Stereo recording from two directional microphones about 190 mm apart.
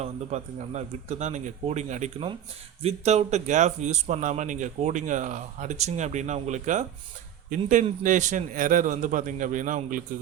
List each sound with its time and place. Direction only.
0.0 s a man's voice: 35° right (ahead or behind)